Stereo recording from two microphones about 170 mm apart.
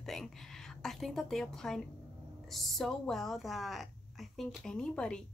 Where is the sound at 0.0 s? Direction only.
Centre (ahead or behind).